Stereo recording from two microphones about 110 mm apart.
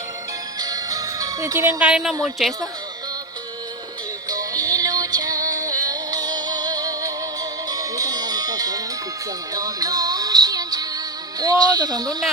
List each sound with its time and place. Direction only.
0.6 s music: 35° right (ahead or behind)
1.8 s speech: 5° right (ahead or behind)
4.3 s music: 35° right (ahead or behind)